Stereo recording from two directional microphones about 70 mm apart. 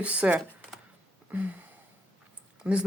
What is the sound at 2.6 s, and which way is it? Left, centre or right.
Speech, centre.